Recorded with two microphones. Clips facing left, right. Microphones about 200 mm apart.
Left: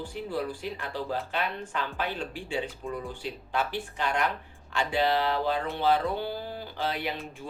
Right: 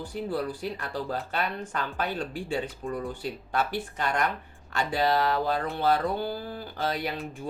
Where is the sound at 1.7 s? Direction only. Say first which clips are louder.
Right 2 dB; 45° right (ahead or behind).